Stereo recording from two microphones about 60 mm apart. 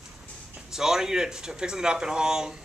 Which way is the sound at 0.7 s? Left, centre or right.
Centre.